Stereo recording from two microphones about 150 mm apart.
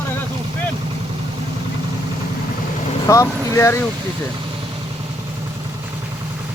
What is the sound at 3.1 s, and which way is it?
Speech, 20° left (ahead or behind).